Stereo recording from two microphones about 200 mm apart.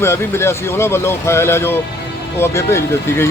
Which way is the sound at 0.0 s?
10° left (ahead or behind).